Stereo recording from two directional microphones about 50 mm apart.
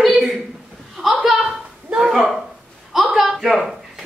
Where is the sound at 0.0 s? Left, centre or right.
Centre.